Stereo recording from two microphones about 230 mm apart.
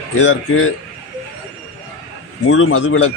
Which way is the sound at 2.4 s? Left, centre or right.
Left.